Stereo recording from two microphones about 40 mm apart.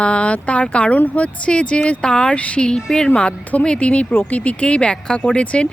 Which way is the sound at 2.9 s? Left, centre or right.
Centre.